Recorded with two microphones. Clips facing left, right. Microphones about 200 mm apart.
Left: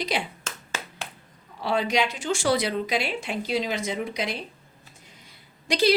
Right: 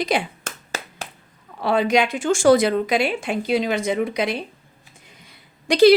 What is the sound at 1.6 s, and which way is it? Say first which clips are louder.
Speech: right 6 dB; 55° right (ahead or behind).